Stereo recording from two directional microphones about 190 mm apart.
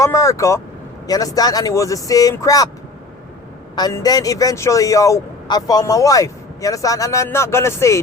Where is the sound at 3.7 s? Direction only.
20° left (ahead or behind).